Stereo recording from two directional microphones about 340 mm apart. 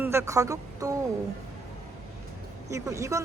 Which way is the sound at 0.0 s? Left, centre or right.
Centre.